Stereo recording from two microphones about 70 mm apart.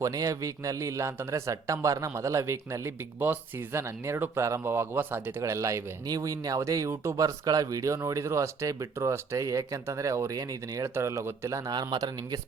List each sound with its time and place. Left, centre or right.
0.0 s speech: right
3.2 s speech: right
5.4 s speech: right
6.1 s speech: right
7.2 s speech: right
10.8 s speech: right
11.7 s a man's voice: right